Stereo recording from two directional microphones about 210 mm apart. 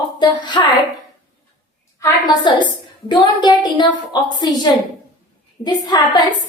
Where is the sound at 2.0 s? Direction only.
20° left (ahead or behind).